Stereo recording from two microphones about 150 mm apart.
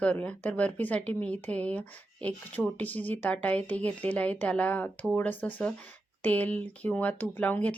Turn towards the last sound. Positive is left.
turn(degrees=10)  # may be behind; listen again after turning